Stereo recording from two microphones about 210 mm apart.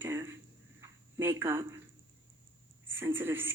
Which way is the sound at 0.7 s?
15° right (ahead or behind).